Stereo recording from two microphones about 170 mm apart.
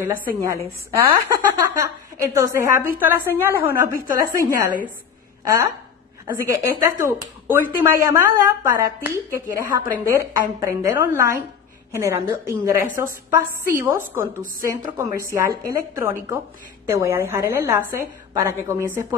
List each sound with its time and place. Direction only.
0.2 s a woman's voice: 15° right (ahead or behind)